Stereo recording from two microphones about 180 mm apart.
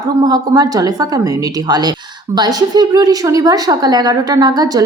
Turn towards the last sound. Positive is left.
turn(degrees=-20)  # may be behind; listen again after turning